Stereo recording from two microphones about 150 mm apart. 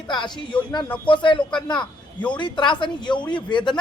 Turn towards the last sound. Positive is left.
turn(degrees=30)  # may be behind; listen again after turning